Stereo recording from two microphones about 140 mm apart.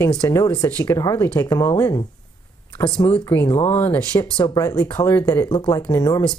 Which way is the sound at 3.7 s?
15° left (ahead or behind).